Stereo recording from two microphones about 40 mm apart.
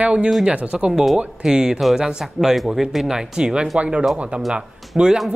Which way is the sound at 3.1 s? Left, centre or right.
Centre.